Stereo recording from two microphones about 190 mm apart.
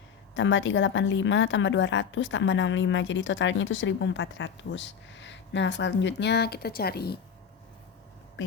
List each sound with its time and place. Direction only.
0.3 s a woman's voice: 75° left (ahead or behind); by 7.2 s 55° left (ahead or behind)